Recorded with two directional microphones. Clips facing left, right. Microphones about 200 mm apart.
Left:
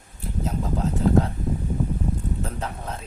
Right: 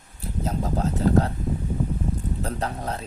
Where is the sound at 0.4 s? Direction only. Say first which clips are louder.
Right 1 dB; 40° right (ahead or behind).